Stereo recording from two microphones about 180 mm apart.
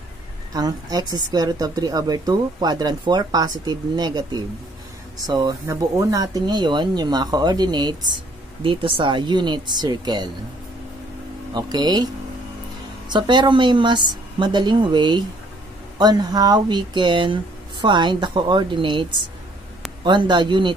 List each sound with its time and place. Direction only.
0.5 s a woman's voice: 20° right (ahead or behind)
11.5 s a woman's voice: 25° right (ahead or behind)
13.1 s a woman's voice: 25° right (ahead or behind)